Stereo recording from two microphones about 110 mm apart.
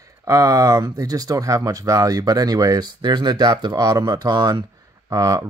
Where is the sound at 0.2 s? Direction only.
30° right (ahead or behind).